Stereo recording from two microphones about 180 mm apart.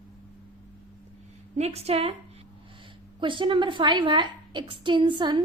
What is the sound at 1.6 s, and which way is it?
Speech, 35° right (ahead or behind).